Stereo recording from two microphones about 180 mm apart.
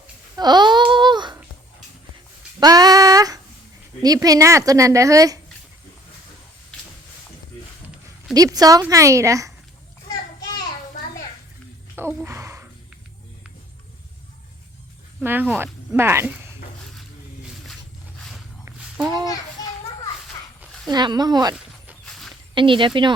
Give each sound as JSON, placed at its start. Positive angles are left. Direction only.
{"t": 0.3, "sound": "babbling", "side_deg": -25}
{"t": 2.6, "sound": "a sound", "side_deg": -20}
{"t": 4.0, "sound": "a woman's voice", "side_deg": -20}
{"t": 8.3, "sound": "speech", "side_deg": -20}
{"t": 12.2, "sound": "gasp", "side_deg": -15}
{"t": 15.2, "sound": "speech", "side_deg": -10}
{"t": 18.2, "sound": "a sound", "side_deg": 0}
{"t": 20.9, "sound": "a woman's voice", "side_deg": -25}
{"t": 21.5, "sound": "walk", "side_deg": 0}
{"t": 22.5, "sound": "a woman's voice", "side_deg": -25}